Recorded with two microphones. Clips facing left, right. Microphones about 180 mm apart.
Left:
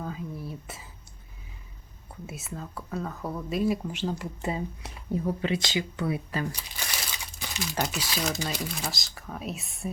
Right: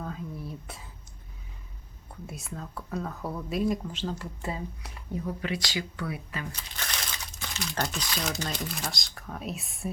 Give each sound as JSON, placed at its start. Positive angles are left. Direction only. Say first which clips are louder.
{"t": 0.0, "sound": "whispering", "louder": "left 1 dB", "side_deg": 5}
{"t": 2.2, "sound": "speech", "louder": "left 1 dB", "side_deg": 5}
{"t": 3.8, "sound": "speech", "louder": "left 3 dB", "side_deg": 15}
{"t": 6.5, "sound": "crumpling", "louder": "even", "side_deg": 10}
{"t": 7.8, "sound": "speech", "louder": "left 2 dB", "side_deg": 5}